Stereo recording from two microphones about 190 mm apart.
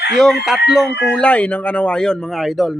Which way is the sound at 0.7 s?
Centre (ahead or behind).